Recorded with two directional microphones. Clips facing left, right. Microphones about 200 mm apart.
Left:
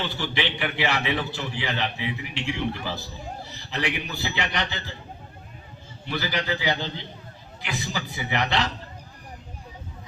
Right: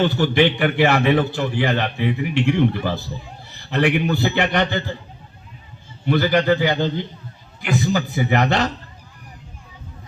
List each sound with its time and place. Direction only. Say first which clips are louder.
0.0 s a man's voice: right 12 dB; 50° right (ahead or behind)
6.1 s a man's voice: right 11 dB; 55° right (ahead or behind)